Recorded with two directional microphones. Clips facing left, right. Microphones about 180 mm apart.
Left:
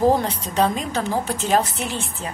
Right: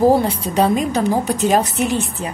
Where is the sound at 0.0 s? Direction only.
10° right (ahead or behind).